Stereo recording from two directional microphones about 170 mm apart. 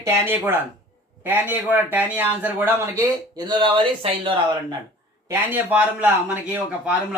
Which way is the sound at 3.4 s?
25° right (ahead or behind).